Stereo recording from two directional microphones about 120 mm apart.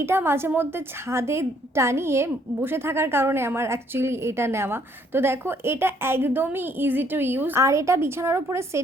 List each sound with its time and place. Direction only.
0.0 s a woman's voice: 20° right (ahead or behind)